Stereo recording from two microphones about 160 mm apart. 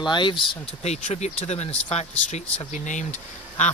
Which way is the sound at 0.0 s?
30° left (ahead or behind).